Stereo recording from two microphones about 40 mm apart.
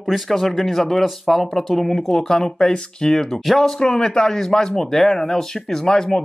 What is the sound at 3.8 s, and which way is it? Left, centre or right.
Speech, centre.